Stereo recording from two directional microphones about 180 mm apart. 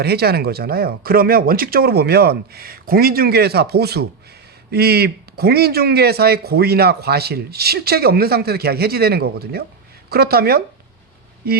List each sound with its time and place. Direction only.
0.0 s speech: 60° right (ahead or behind)